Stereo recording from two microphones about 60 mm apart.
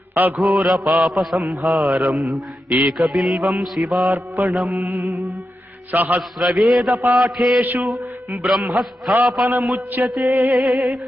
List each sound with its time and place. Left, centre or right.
0.1 s mantra: right
0.3 s mantra: centre
4.1 s mantra: right
4.7 s music: right
5.9 s a man's voice: right
6.4 s mantra: centre
7.6 s music: right
8.4 s mantra: centre
9.4 s mantra: right
9.7 s music: right
10.6 s mantra: centre